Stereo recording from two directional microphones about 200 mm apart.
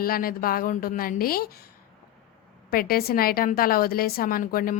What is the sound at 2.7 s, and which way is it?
A woman's voice, 50° left (ahead or behind).